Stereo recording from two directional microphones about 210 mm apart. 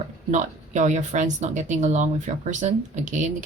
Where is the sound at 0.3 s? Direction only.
35° right (ahead or behind).